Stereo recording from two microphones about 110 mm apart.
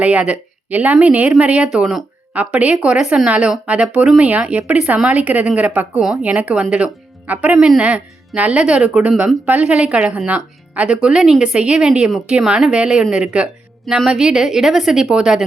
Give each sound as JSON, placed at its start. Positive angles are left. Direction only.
{"t": 0.0, "sound": "a woman's voice", "side_deg": -10}